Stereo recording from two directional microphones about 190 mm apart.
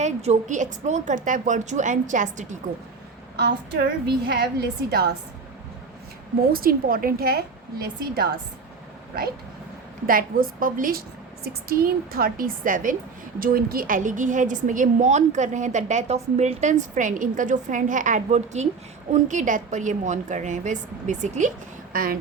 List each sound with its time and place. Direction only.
0.0 s a woman's voice: 35° right (ahead or behind)
3.3 s a woman's voice: 60° right (ahead or behind)
6.5 s a woman's voice: 50° right (ahead or behind)
10.1 s a woman's voice: 50° right (ahead or behind)